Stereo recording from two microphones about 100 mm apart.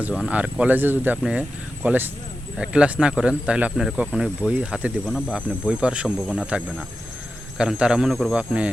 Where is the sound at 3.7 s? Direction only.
Centre (ahead or behind).